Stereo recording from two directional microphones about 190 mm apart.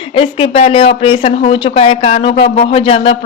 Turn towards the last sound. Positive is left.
turn(degrees=30)  # may be behind; listen again after turning